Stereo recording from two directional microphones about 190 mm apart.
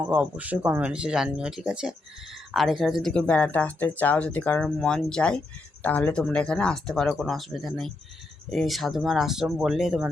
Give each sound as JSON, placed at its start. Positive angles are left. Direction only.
{"t": 0.0, "sound": "speech", "side_deg": -10}